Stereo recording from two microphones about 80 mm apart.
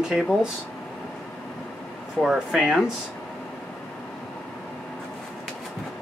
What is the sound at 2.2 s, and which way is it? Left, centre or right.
Speech, centre.